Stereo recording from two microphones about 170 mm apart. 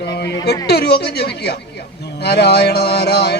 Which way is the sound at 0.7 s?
70° left (ahead or behind).